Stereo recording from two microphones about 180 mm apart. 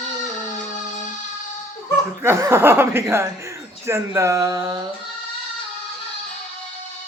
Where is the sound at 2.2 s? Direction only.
15° right (ahead or behind).